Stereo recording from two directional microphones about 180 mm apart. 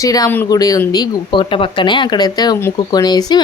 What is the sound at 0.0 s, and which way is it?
Speech, 20° left (ahead or behind).